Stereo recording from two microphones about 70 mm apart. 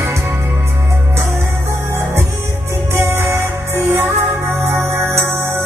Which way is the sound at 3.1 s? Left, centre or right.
Right.